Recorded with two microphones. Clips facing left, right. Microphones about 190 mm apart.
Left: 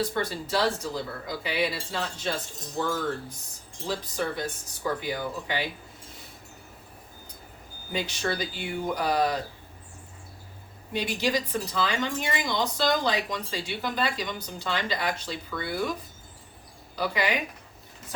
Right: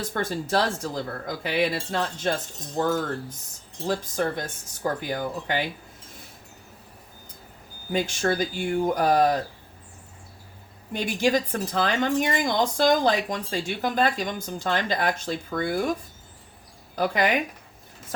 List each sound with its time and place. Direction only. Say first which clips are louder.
0.1 s a woman's voice: right 3 dB; 50° right (ahead or behind)
7.9 s a woman's voice: right 5 dB; 45° right (ahead or behind)
10.9 s a woman's voice: right 4 dB; 50° right (ahead or behind)